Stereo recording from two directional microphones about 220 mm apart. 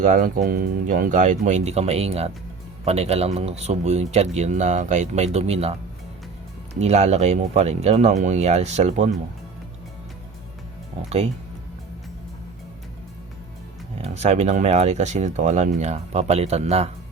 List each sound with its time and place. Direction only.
0.0 s speech: 35° right (ahead or behind)
6.7 s speech: 30° right (ahead or behind)
14.0 s speech: 30° right (ahead or behind)